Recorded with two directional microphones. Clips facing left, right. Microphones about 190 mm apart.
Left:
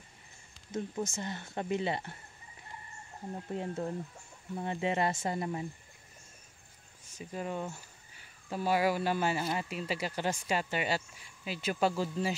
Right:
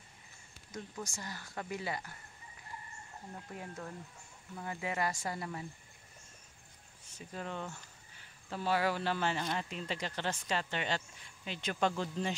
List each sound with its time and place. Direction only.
0.7 s speech: 25° left (ahead or behind)
3.3 s speech: 30° left (ahead or behind)
7.2 s speech: 10° left (ahead or behind)